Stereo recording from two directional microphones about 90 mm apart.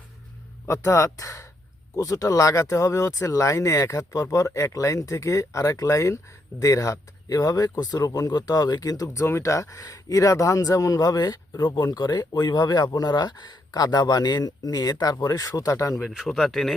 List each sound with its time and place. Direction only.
0.7 s speech: 30° left (ahead or behind)
16.0 s speech: centre (ahead or behind)